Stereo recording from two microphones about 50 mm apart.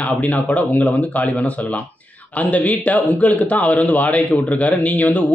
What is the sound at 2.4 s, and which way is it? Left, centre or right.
Speech, left.